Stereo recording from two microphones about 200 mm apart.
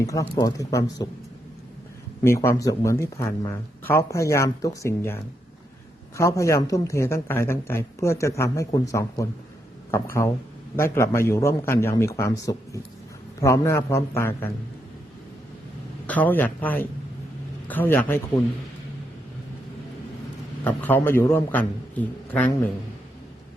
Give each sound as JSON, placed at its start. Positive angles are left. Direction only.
{"t": 0.0, "sound": "speech", "side_deg": 15}
{"t": 2.2, "sound": "speech", "side_deg": 10}
{"t": 16.0, "sound": "speech", "side_deg": 10}
{"t": 20.7, "sound": "speech", "side_deg": 10}